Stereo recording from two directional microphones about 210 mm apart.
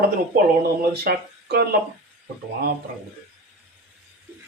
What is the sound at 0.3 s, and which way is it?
Speech, 45° right (ahead or behind).